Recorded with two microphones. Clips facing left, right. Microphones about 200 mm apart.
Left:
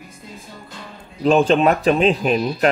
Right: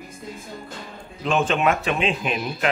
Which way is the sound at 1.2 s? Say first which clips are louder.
Left 6 dB; 35° left (ahead or behind).